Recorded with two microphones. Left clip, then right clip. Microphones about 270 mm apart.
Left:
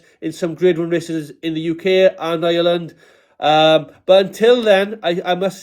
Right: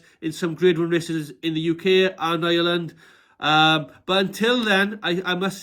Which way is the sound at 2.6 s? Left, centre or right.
Left.